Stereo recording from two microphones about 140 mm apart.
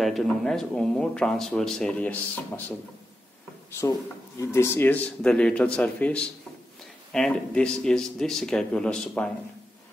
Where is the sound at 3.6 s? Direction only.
20° left (ahead or behind).